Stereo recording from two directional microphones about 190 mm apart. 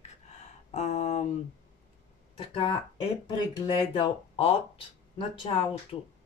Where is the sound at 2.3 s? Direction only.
30° left (ahead or behind).